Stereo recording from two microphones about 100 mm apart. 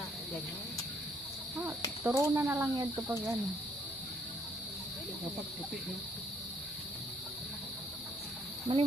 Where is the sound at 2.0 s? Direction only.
30° right (ahead or behind).